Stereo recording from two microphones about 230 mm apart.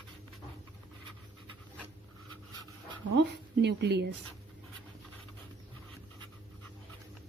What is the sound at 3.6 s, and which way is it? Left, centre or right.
Speech, right.